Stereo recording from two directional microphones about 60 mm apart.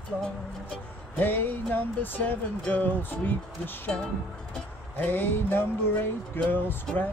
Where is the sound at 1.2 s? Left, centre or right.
Left.